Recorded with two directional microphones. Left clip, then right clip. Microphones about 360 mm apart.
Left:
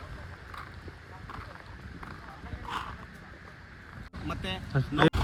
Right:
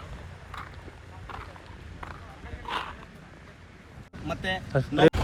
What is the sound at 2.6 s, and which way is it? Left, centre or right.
Dog, centre.